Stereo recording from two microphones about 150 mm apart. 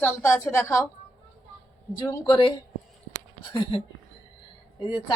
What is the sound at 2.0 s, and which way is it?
Speech, 25° left (ahead or behind).